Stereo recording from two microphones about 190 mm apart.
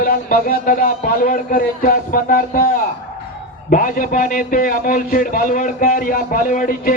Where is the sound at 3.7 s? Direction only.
45° left (ahead or behind).